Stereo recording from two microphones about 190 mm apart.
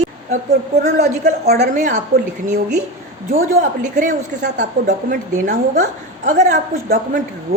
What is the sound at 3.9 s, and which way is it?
A woman's voice, 40° right (ahead or behind).